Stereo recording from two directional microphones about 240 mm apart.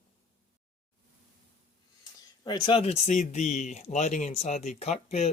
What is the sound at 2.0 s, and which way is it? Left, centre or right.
Speech, centre.